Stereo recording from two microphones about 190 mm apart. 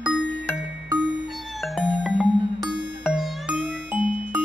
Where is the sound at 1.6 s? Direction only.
Centre (ahead or behind).